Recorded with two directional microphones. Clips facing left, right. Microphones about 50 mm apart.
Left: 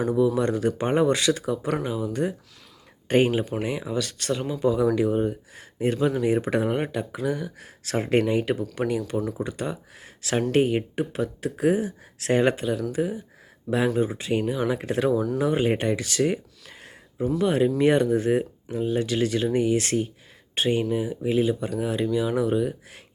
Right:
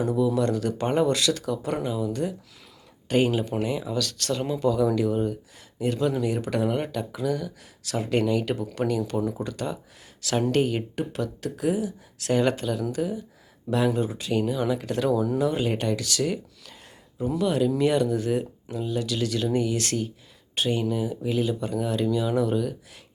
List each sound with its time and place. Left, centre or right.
0.0 s speech: left
7.6 s speech: left
8.7 s speech: centre